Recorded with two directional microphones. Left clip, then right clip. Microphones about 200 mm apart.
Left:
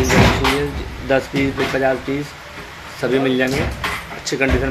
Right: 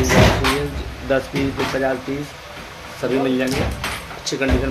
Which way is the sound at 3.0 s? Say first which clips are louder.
Left 3 dB; 15° left (ahead or behind).